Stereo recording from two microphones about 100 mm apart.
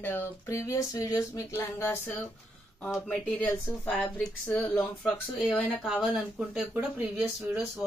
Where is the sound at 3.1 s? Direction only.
15° left (ahead or behind).